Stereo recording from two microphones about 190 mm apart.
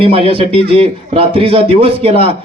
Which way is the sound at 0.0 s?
30° right (ahead or behind).